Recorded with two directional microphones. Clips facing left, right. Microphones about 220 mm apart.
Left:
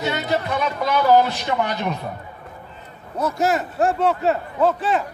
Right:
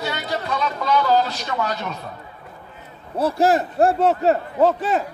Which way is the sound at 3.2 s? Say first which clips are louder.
Right 3 dB; 30° right (ahead or behind).